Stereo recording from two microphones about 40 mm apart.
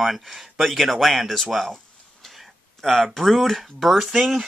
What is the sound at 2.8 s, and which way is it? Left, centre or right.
Speech, centre.